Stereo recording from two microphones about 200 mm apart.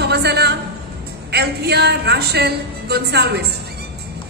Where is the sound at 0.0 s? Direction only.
55° right (ahead or behind).